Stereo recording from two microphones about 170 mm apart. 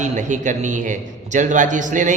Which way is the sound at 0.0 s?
45° right (ahead or behind).